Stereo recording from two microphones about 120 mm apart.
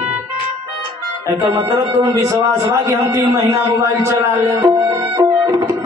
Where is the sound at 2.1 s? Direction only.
25° right (ahead or behind).